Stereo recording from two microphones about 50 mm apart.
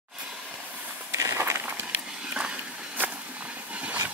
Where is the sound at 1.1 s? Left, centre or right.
Right.